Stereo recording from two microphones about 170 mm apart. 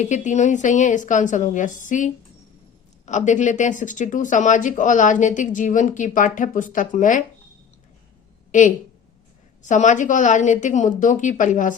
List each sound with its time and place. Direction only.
0.0 s speech: 45° left (ahead or behind)
8.5 s speech: 50° left (ahead or behind)